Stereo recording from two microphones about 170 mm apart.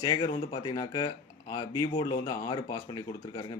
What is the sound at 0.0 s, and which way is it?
Speech, 25° left (ahead or behind).